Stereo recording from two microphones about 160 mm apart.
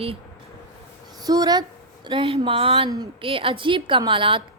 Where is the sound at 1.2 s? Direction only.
25° right (ahead or behind).